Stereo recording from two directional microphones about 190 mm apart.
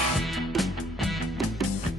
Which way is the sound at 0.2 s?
Centre (ahead or behind).